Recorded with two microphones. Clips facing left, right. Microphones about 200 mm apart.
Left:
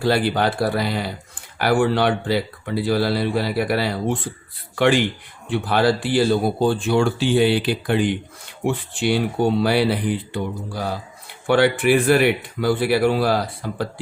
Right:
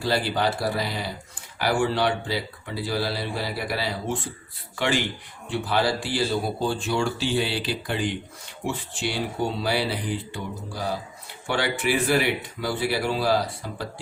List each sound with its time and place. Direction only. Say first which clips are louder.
0.0 s speech: left 5 dB; 60° left (ahead or behind)
11.4 s speech: left 9 dB; 55° left (ahead or behind)